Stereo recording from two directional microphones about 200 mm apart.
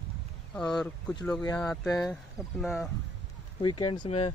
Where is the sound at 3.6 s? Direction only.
25° left (ahead or behind).